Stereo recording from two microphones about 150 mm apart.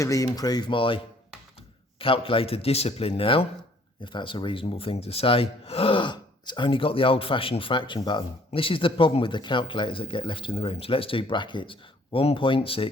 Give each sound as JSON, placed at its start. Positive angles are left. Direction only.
{"t": 0.0, "sound": "speech", "side_deg": 25}